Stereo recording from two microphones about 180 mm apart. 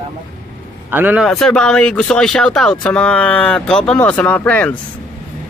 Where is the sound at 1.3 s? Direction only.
5° left (ahead or behind).